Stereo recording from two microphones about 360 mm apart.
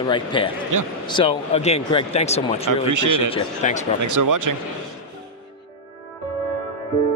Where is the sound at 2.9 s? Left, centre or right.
Right.